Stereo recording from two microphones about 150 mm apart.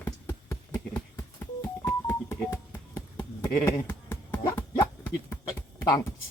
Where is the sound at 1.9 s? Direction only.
15° left (ahead or behind).